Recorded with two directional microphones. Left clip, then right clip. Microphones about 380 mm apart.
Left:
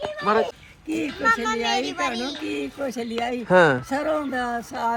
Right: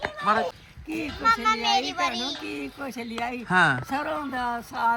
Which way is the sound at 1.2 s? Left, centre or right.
Centre.